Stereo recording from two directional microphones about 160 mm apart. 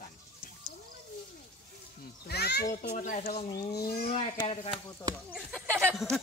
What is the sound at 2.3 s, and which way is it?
Speech, 90° left.